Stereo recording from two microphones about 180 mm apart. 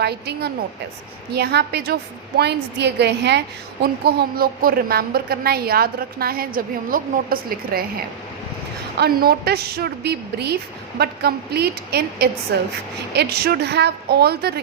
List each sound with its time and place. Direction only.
0.0 s a woman's voice: 65° right (ahead or behind)
4.0 s a woman's voice: 55° right (ahead or behind)